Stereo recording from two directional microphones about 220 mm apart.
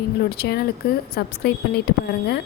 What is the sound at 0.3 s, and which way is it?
A woman's voice, 45° left (ahead or behind).